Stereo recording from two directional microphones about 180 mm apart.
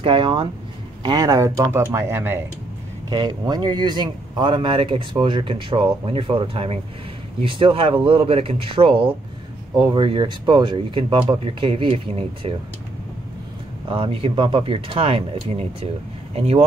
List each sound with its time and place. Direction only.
0.0 s speech: 30° right (ahead or behind)
3.1 s speech: 25° right (ahead or behind)
13.8 s speech: 30° right (ahead or behind)